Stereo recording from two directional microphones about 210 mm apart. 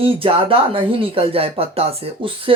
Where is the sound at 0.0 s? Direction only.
25° right (ahead or behind).